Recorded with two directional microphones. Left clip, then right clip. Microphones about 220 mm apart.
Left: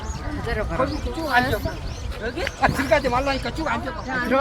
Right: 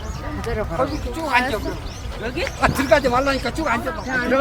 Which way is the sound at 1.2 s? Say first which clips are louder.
Right 1 dB; 60° right (ahead or behind).